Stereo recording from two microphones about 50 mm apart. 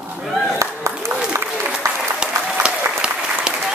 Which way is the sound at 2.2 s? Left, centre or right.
Centre.